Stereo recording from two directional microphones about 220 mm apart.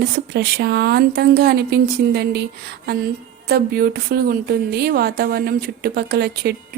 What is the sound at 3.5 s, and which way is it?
Speech, 45° right (ahead or behind).